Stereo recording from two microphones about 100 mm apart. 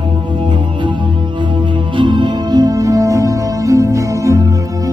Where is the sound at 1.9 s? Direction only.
55° right (ahead or behind); by 4.9 s 35° right (ahead or behind).